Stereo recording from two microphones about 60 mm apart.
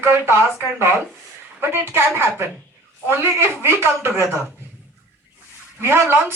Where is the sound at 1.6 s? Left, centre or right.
Right.